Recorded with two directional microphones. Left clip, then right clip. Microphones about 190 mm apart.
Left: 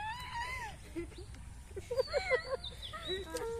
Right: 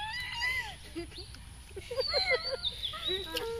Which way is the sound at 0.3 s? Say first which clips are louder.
Right 7 dB; 40° right (ahead or behind).